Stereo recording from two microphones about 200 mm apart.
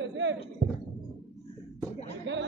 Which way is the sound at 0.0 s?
70° right (ahead or behind).